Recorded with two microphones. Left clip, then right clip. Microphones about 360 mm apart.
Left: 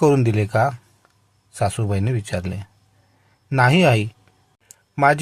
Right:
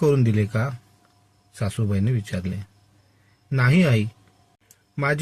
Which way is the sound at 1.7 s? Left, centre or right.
Left.